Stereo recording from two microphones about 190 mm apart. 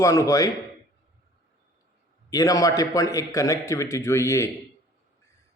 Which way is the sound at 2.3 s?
20° left (ahead or behind).